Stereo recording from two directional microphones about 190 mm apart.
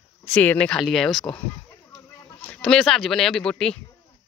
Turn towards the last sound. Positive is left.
turn(degrees=5)  # may be behind; listen again after turning